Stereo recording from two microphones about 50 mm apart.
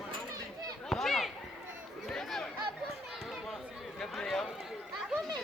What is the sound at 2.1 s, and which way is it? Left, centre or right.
Chatter, centre.